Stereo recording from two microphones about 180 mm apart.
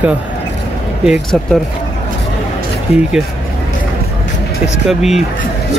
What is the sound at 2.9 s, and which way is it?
Speech, 35° left (ahead or behind).